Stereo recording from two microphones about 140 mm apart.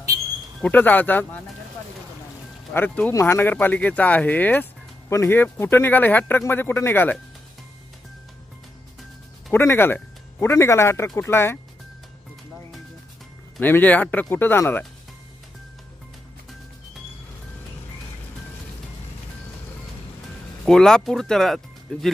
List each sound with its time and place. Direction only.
0.6 s speech: 10° left (ahead or behind)
2.7 s speech: 15° left (ahead or behind)
9.5 s speech: 15° left (ahead or behind)
13.6 s speech: 15° left (ahead or behind)
20.6 s speech: 5° left (ahead or behind)